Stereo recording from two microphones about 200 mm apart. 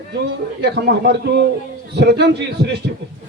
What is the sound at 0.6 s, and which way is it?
A man's voice, 55° right (ahead or behind).